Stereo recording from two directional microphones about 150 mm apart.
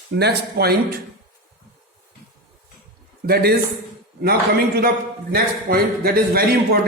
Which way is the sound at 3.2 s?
90° right.